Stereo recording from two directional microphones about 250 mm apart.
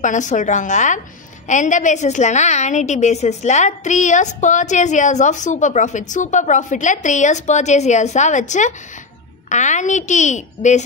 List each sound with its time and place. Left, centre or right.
0.0 s a woman's voice: left